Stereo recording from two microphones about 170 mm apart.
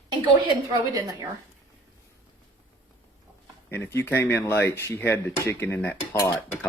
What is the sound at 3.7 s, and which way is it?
Speech, 15° left (ahead or behind).